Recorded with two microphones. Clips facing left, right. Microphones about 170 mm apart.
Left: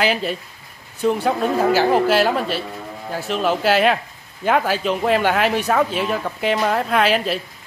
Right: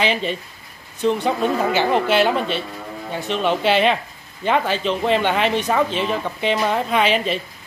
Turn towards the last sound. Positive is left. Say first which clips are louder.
# left 1 dB
turn(degrees=5)  # may be behind; listen again after turning